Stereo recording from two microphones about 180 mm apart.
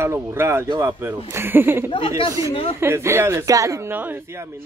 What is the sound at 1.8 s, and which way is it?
Speech, 30° left (ahead or behind).